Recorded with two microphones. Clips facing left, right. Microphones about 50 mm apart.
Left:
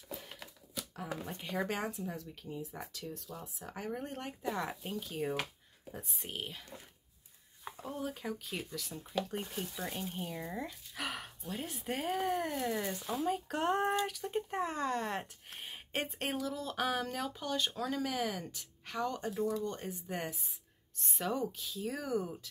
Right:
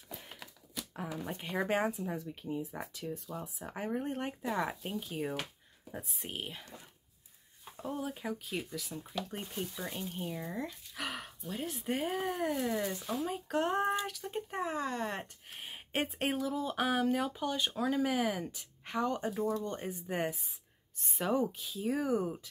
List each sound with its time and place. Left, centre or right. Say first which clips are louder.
0.3 s a sound: even; centre
1.2 s speech: right 2 dB; centre
7.7 s speech: right 2 dB; centre
21.0 s speech: right 2 dB; centre
21.3 s speech: right 4 dB; centre